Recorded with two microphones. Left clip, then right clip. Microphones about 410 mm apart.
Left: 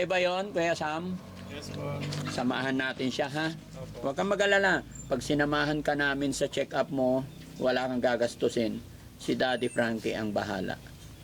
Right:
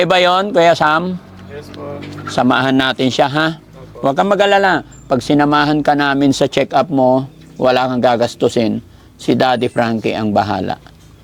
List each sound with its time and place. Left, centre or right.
0.0 s speech: right
2.3 s speech: right